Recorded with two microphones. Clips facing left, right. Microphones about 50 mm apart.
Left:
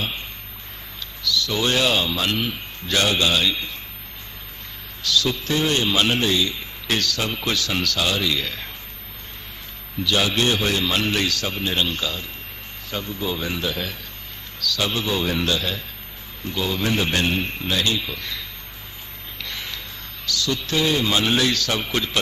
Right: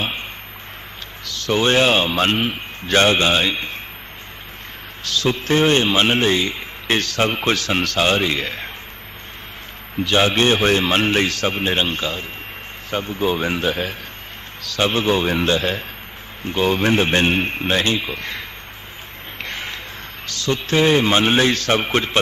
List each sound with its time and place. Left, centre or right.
0.0 s a sound: right
1.2 s a man's voice: right
5.0 s a man's voice: right
10.0 s a man's voice: right
19.4 s a sound: right
20.2 s a man's voice: right